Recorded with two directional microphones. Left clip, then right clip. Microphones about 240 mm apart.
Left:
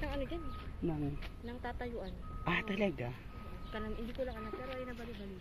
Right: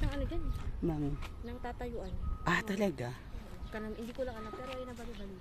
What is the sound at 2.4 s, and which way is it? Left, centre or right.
Speech, right.